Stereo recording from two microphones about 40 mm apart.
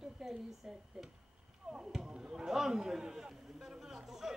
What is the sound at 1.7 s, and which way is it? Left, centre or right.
Speech, centre.